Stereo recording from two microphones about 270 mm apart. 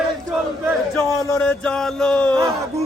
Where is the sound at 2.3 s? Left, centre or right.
Centre.